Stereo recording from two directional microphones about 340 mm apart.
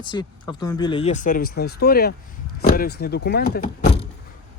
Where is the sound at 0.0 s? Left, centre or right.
Centre.